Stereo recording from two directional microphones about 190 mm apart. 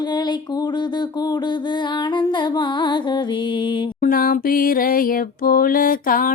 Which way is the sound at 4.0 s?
50° left (ahead or behind).